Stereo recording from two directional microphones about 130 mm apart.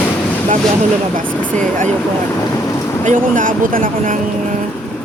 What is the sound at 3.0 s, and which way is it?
Speech, 90° right.